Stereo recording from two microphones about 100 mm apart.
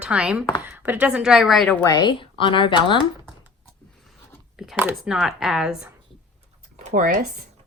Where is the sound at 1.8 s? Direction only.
45° left (ahead or behind).